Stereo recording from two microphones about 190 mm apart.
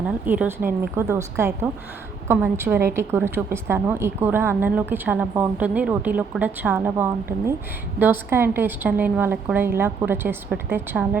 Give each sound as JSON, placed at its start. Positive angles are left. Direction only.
{"t": 0.0, "sound": "a woman's voice", "side_deg": -5}